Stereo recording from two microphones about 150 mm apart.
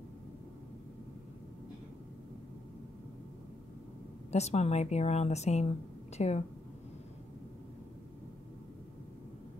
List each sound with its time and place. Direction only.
4.3 s a woman's voice: 45° left (ahead or behind)